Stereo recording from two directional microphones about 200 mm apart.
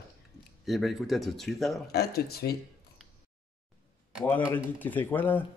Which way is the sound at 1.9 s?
50° left (ahead or behind).